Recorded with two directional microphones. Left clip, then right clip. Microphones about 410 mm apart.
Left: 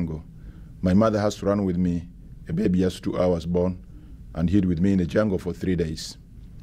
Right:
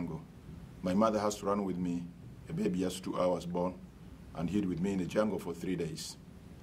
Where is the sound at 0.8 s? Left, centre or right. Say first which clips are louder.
Left 8 dB; left.